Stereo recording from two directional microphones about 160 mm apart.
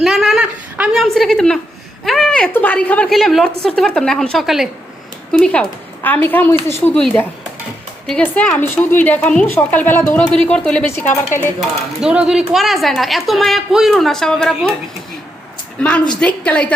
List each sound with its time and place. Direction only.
0.0 s a sound: centre (ahead or behind)
2.0 s a woman's voice: 5° left (ahead or behind)
8.0 s a woman's voice: 5° left (ahead or behind)
11.9 s a woman's voice: 5° right (ahead or behind)
15.8 s a woman's voice: 10° left (ahead or behind)